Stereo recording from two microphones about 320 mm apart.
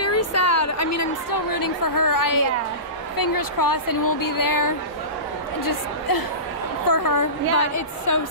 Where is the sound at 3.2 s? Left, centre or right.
Left.